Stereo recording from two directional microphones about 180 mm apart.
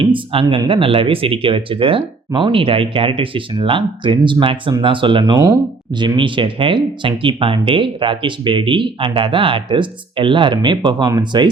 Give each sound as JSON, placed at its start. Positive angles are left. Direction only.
{"t": 0.0, "sound": "speech", "side_deg": -30}